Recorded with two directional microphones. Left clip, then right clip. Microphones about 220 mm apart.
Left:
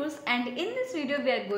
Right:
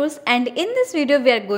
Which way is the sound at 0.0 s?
45° right (ahead or behind).